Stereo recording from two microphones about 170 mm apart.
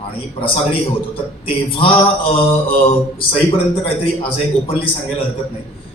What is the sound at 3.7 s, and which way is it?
Mantra, 30° left (ahead or behind).